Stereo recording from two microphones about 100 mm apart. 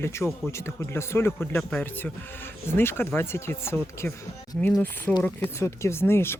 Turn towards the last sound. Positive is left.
turn(degrees=25)  # may be behind; listen again after turning